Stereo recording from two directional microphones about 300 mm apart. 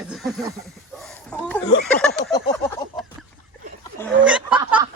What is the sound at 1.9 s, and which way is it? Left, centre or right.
Speech, centre.